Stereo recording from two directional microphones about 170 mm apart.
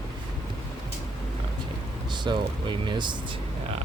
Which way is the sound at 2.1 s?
25° right (ahead or behind).